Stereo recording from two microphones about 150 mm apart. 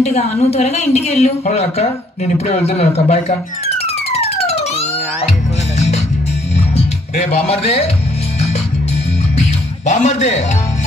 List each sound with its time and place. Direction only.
0.0 s a woman's voice: 50° left (ahead or behind)
6.5 s music: 45° left (ahead or behind)
9.4 s music: 50° left (ahead or behind)